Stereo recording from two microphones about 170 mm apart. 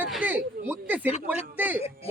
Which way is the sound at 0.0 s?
10° right (ahead or behind).